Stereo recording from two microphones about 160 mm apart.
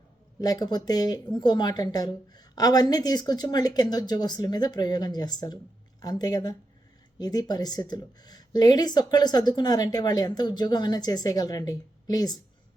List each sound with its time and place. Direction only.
0.4 s speech: 25° left (ahead or behind)